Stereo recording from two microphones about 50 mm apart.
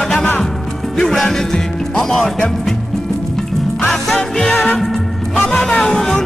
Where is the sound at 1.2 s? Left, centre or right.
Centre.